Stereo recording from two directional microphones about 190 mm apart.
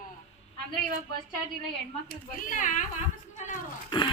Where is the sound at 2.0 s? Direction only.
45° left (ahead or behind).